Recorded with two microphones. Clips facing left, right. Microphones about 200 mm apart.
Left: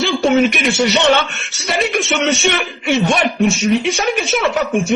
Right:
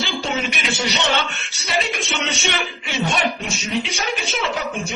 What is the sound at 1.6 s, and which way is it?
A man's voice, 55° left (ahead or behind).